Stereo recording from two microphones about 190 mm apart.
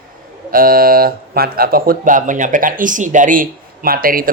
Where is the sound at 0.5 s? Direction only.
50° right (ahead or behind).